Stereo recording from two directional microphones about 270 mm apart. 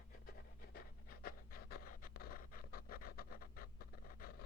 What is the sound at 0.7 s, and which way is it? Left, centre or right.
Pant, left.